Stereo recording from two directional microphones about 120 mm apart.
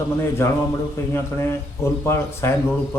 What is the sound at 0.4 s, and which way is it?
Speech, 20° left (ahead or behind).